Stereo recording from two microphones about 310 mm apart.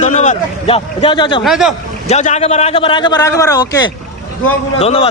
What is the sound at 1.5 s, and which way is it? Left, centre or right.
Speech, centre.